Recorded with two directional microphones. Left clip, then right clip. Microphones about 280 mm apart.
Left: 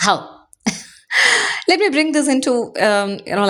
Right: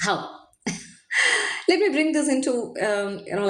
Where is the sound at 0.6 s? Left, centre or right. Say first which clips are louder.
Left 9 dB; left.